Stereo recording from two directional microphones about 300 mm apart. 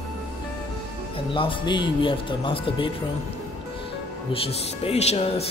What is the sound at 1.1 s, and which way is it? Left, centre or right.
Speech, centre.